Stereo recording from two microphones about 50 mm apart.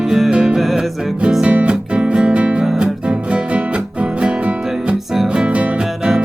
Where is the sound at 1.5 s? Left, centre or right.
Right.